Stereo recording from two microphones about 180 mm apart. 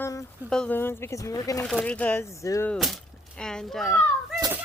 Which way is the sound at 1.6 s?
5° left (ahead or behind).